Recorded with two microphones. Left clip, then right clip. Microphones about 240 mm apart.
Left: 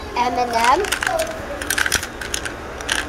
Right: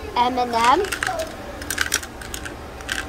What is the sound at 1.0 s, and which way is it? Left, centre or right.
Typing, centre.